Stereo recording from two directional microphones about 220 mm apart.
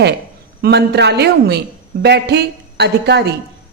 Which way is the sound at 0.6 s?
50° right (ahead or behind).